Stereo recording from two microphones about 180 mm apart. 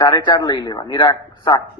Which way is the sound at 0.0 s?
25° left (ahead or behind).